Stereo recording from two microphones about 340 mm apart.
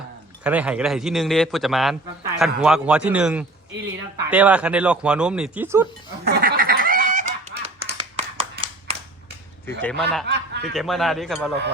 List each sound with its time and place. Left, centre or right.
0.4 s a man's voice: centre
6.2 s goose: right
9.6 s a man's voice: centre
10.2 s snicker: right
10.8 s a man's voice: centre